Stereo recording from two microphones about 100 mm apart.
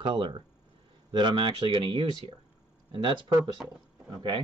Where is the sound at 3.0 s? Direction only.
50° right (ahead or behind).